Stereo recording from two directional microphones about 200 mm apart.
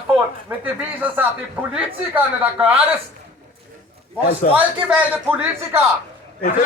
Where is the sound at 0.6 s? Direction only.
10° right (ahead or behind).